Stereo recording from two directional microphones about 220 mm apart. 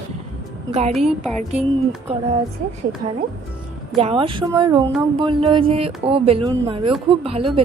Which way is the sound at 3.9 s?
25° right (ahead or behind).